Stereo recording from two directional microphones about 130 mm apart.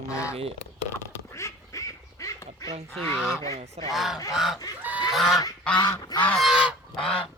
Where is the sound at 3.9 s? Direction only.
Centre (ahead or behind).